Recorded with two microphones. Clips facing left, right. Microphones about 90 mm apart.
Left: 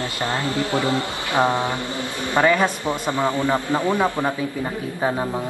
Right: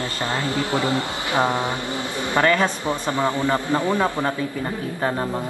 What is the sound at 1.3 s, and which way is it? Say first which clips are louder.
Speech: left 2 dB; 20° left (ahead or behind).